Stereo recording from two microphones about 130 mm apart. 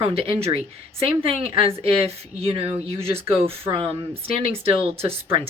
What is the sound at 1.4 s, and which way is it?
Speech, 45° right (ahead or behind).